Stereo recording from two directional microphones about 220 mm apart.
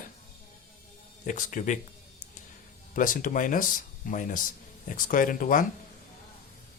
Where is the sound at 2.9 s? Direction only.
35° left (ahead or behind).